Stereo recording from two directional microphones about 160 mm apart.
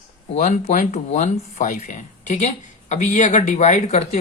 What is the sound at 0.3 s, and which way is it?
Speech, 50° left (ahead or behind).